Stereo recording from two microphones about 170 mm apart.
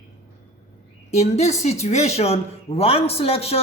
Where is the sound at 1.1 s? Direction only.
40° left (ahead or behind).